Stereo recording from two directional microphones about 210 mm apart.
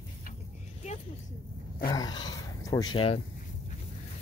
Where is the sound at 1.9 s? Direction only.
20° left (ahead or behind).